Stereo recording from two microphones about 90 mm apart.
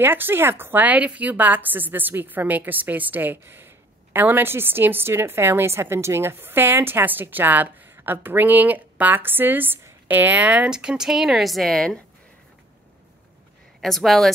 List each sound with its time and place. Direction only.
0.0 s a woman's voice: 25° right (ahead or behind); by 12.0 s 5° left (ahead or behind)
13.7 s speech: centre (ahead or behind)